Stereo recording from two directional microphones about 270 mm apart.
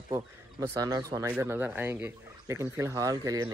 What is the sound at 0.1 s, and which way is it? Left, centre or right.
Speech, centre.